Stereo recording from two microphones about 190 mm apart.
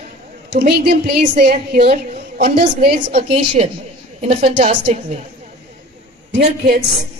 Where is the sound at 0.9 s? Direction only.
60° right (ahead or behind).